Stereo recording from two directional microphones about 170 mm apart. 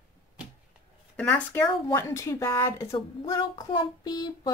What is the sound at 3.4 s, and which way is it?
Child singing, 25° left (ahead or behind).